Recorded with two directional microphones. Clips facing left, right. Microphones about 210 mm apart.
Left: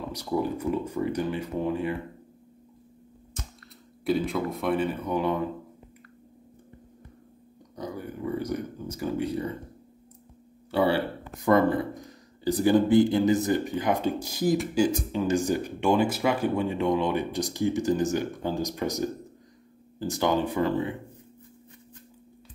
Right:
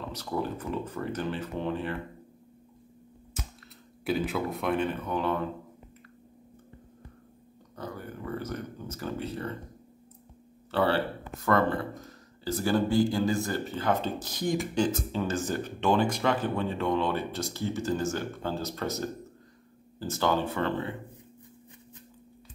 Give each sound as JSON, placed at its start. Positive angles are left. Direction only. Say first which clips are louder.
{"t": 0.1, "sound": "speech", "louder": "left 5 dB", "side_deg": 15}
{"t": 3.4, "sound": "cap gun", "louder": "right 1 dB", "side_deg": -5}
{"t": 4.0, "sound": "speech", "louder": "left 3 dB", "side_deg": 0}
{"t": 7.7, "sound": "speech", "louder": "left 4 dB", "side_deg": 15}
{"t": 10.7, "sound": "speech", "louder": "left 2 dB", "side_deg": 15}